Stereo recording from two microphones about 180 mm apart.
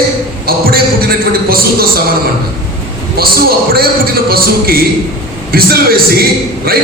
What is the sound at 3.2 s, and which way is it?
A man's voice, 55° right (ahead or behind).